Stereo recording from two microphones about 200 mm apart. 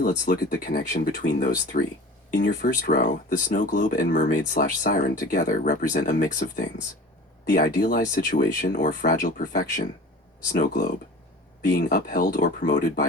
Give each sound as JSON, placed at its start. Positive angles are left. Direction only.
{"t": 0.0, "sound": "speech", "side_deg": 45}